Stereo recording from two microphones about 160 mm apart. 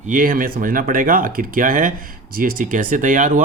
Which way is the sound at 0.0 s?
55° right (ahead or behind).